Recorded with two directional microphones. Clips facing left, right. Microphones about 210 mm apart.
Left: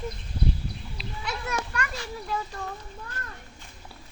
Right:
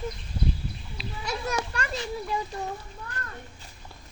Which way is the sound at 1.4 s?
30° right (ahead or behind).